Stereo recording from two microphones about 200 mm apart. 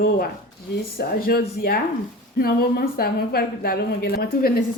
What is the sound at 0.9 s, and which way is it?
A woman's voice, 50° left (ahead or behind).